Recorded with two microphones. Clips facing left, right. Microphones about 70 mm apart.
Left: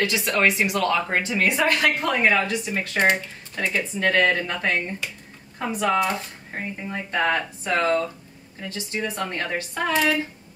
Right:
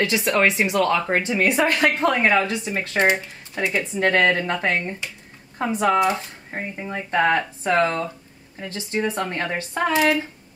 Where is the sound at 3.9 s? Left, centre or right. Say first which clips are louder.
Right 2 dB; right.